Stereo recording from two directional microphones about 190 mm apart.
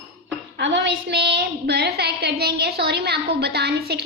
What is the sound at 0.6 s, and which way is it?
A woman's voice, 70° right (ahead or behind).